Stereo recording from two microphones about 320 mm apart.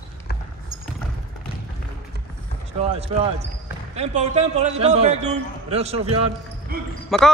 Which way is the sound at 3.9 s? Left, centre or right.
Right.